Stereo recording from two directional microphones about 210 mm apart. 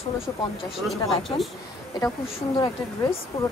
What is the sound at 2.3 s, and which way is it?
Speech, 25° left (ahead or behind).